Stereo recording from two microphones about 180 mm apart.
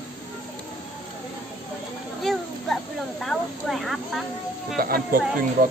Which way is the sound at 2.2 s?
Centre (ahead or behind).